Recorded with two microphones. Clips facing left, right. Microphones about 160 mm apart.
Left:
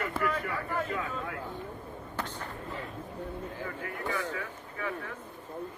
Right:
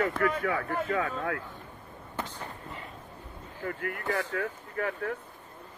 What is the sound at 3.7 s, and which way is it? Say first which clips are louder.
Speech: right 6 dB; 50° right (ahead or behind).